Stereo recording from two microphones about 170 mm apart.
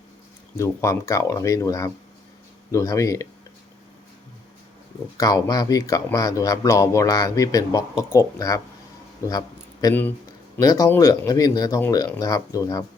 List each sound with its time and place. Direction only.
0.5 s speech: 15° left (ahead or behind)
5.1 s speech: 20° left (ahead or behind)